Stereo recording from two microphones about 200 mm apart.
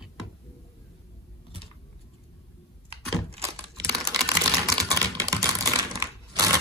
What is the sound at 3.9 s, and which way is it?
Typing, 20° right (ahead or behind).